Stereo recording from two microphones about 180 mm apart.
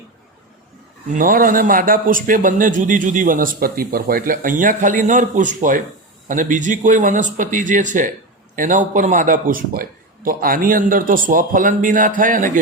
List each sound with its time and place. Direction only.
1.1 s speech: 50° right (ahead or behind)